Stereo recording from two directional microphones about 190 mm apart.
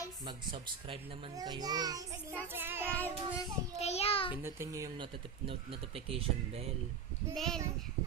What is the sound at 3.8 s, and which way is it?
Speech, 35° left (ahead or behind).